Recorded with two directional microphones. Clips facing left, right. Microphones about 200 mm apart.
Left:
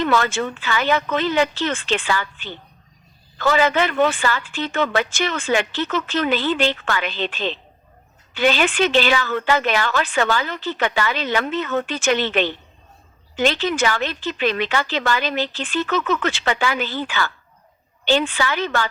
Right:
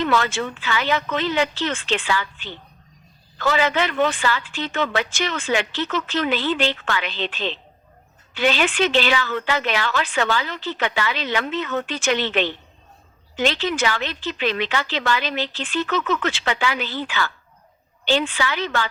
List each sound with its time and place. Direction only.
0.0 s a woman's voice: 45° left (ahead or behind)